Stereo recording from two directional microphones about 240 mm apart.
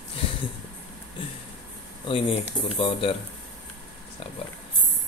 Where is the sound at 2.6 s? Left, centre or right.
Left.